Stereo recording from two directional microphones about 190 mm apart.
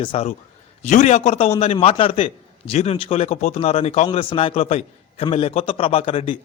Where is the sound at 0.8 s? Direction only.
40° left (ahead or behind).